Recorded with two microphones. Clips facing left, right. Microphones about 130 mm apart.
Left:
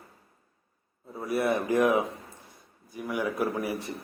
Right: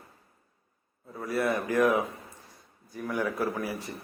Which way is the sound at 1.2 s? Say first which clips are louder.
Left 2 dB; 20° left (ahead or behind).